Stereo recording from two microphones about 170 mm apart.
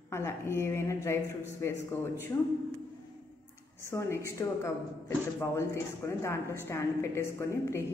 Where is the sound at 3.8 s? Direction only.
15° left (ahead or behind).